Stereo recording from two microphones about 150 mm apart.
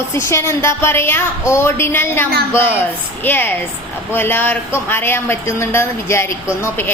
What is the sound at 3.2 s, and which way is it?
A woman's voice, 15° left (ahead or behind).